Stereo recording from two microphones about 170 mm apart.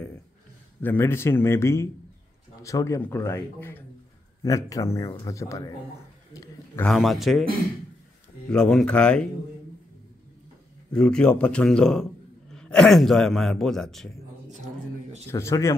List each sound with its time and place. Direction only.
0.8 s speech: 15° left (ahead or behind)
6.3 s a sound: 20° left (ahead or behind)
6.8 s a man's voice: centre (ahead or behind)
8.5 s a man's voice: 5° left (ahead or behind)
10.9 s a man's voice: 5° left (ahead or behind)
15.2 s speech: 15° left (ahead or behind)